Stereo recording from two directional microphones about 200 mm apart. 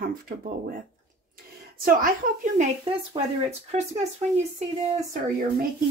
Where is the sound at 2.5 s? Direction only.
30° right (ahead or behind).